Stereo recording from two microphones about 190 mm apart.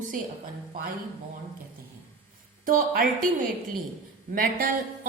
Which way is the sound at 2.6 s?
50° right (ahead or behind).